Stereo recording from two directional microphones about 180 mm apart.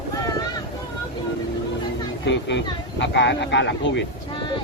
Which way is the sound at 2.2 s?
85° left.